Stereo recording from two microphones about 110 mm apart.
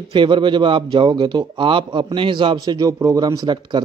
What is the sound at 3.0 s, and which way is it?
Speech, 30° right (ahead or behind).